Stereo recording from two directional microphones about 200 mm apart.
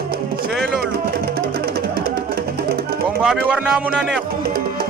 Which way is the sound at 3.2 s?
5° right (ahead or behind).